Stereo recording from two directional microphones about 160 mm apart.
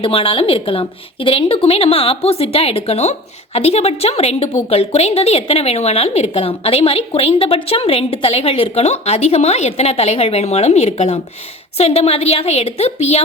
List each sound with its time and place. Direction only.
0.0 s a woman's voice: 35° left (ahead or behind)